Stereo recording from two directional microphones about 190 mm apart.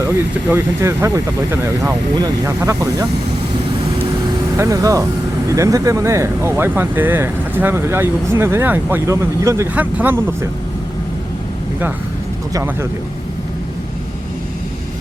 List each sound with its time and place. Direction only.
0.5 s speech: 15° right (ahead or behind)
4.5 s speech: 15° right (ahead or behind)
12.5 s speech: 15° right (ahead or behind)